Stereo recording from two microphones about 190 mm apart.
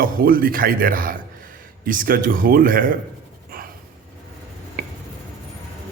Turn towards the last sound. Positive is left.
turn(degrees=-50)  # may be behind; listen again after turning